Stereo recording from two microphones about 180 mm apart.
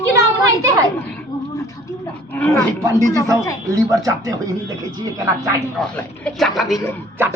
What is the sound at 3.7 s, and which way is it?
Speech, 20° right (ahead or behind).